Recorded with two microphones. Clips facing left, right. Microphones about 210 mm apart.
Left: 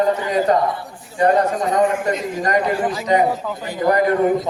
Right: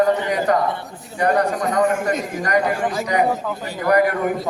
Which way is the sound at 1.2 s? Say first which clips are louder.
Left 2 dB; 25° left (ahead or behind).